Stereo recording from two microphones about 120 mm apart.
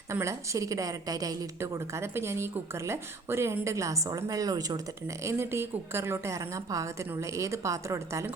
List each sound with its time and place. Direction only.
0.1 s a woman's voice: 25° right (ahead or behind)